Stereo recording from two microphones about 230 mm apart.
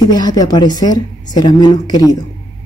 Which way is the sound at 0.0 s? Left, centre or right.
Centre.